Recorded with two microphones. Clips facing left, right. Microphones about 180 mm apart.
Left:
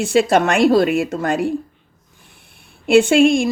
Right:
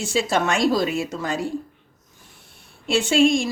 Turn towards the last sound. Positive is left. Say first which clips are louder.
# left 5 dB
turn(degrees=60)  # may be behind; listen again after turning